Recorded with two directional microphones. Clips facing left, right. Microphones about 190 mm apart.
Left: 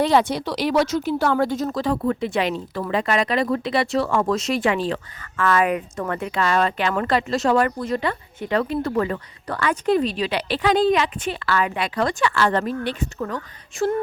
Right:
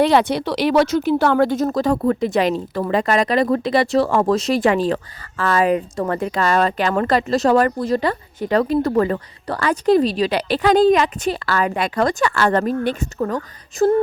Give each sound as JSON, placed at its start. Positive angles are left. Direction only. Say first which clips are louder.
{"t": 0.0, "sound": "speech", "louder": "right 3 dB", "side_deg": -70}